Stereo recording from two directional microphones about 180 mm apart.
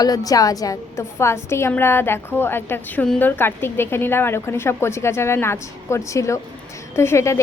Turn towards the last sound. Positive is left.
turn(degrees=15)  # may be behind; listen again after turning